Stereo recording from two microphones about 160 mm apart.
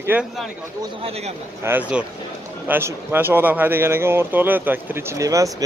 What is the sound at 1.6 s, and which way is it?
Speech, 10° right (ahead or behind).